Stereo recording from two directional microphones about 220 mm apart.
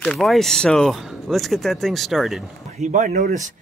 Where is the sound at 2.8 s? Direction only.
35° right (ahead or behind).